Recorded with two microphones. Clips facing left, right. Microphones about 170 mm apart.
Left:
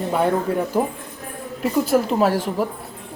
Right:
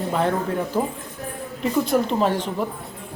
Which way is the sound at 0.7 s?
15° left (ahead or behind).